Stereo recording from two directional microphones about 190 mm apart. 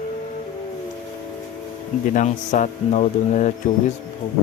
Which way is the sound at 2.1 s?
40° left (ahead or behind).